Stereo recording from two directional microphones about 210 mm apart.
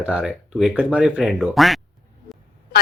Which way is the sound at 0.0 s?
5° right (ahead or behind).